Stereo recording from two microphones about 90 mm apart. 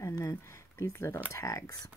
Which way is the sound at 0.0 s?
40° left (ahead or behind).